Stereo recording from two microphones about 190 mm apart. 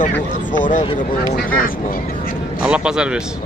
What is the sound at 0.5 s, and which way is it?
Speech, 45° left (ahead or behind).